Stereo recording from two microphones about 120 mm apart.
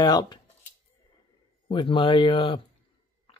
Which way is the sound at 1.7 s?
45° left (ahead or behind).